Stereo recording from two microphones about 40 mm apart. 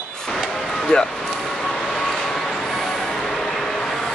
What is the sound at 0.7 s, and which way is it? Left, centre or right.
Music, centre.